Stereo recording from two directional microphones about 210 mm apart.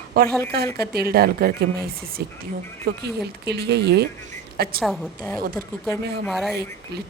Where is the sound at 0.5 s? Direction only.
50° right (ahead or behind).